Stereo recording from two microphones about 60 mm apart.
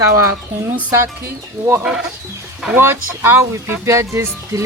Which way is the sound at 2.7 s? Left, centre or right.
Right.